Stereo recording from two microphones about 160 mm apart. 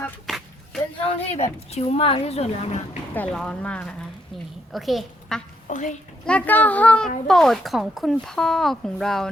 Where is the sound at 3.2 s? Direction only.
5° left (ahead or behind).